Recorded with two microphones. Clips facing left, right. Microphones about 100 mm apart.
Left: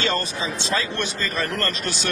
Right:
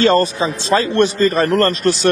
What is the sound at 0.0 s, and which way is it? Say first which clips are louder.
Speech: right 11 dB; 45° right (ahead or behind).